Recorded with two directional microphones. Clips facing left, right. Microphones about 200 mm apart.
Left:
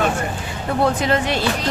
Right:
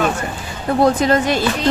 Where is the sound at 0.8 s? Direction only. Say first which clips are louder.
Right 4 dB; 40° right (ahead or behind).